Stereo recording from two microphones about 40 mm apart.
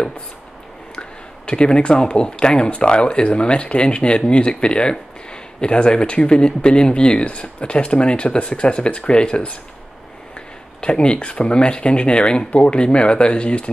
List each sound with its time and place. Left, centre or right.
0.9 s speech: left
10.8 s speech: left